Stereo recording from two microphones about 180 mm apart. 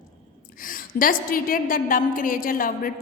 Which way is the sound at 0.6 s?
50° left (ahead or behind).